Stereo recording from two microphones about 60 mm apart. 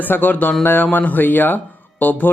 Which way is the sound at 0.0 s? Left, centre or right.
Left.